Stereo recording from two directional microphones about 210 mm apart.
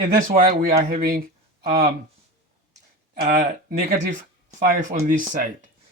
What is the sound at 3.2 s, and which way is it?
Speech, 40° right (ahead or behind).